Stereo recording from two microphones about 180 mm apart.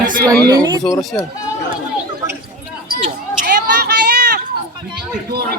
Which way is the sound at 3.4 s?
65° right (ahead or behind).